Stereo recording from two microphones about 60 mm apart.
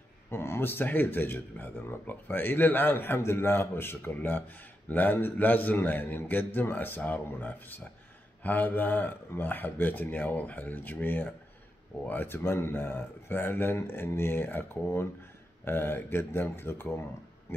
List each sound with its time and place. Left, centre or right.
0.3 s speech: left
17.5 s pig: left